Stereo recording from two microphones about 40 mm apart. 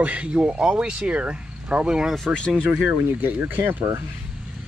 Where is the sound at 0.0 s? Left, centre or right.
Right.